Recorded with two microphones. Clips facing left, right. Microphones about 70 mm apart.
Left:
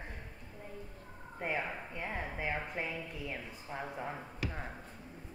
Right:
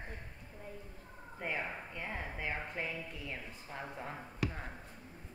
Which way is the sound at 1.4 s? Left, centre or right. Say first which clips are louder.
Left 2 dB; centre.